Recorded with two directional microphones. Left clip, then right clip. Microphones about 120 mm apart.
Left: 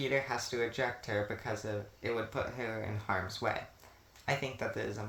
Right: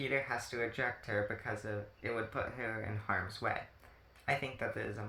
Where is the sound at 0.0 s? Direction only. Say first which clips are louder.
Left 2 dB; 35° left (ahead or behind).